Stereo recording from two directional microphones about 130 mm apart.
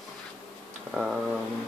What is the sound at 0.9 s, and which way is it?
Speech, centre (ahead or behind).